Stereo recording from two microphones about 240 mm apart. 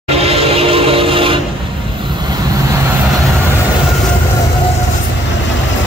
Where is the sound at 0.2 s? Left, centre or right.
Right.